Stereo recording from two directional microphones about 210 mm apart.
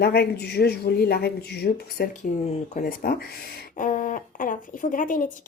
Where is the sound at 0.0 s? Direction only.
50° left (ahead or behind).